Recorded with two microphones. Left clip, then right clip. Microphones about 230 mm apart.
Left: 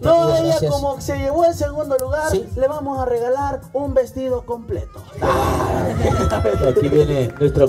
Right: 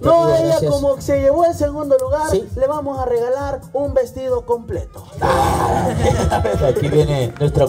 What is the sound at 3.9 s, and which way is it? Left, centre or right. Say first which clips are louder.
Speech: left 1 dB; centre.